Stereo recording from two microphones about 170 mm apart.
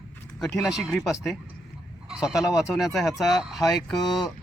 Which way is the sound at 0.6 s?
5° right (ahead or behind).